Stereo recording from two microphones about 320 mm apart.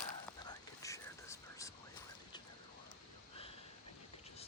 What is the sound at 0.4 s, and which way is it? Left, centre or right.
Whispering, centre.